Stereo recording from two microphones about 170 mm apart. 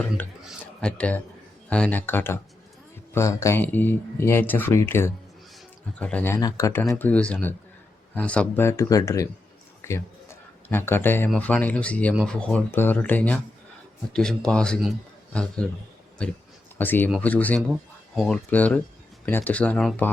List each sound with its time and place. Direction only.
0.4 s speech: 5° left (ahead or behind)
9.8 s a sound: 15° left (ahead or behind)
11.3 s a man's voice: 10° left (ahead or behind)